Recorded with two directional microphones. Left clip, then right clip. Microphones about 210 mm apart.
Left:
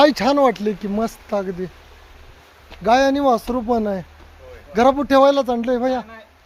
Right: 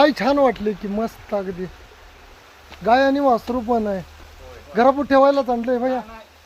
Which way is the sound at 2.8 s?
20° left (ahead or behind).